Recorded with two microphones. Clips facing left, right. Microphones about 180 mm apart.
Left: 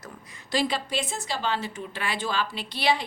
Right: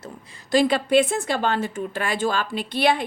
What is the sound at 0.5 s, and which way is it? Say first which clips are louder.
A woman's voice: right 9 dB; 55° right (ahead or behind).